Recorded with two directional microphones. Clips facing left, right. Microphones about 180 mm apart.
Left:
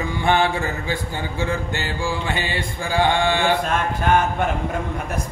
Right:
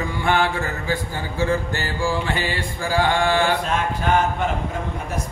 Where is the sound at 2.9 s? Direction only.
20° left (ahead or behind).